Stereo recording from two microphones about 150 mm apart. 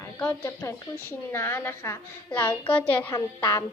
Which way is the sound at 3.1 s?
25° left (ahead or behind).